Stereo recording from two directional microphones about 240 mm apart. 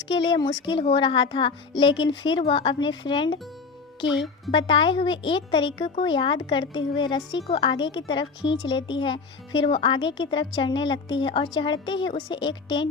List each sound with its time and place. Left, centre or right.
0.1 s speech: centre
4.0 s speech: left
4.5 s speech: left